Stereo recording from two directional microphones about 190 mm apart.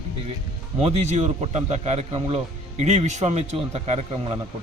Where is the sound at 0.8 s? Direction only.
35° right (ahead or behind).